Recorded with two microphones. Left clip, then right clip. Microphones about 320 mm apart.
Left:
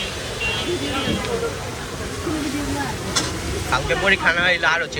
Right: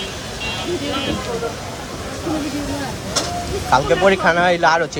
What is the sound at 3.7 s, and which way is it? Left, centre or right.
Speech, centre.